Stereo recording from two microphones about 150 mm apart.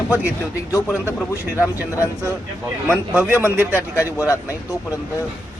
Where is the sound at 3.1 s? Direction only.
10° right (ahead or behind).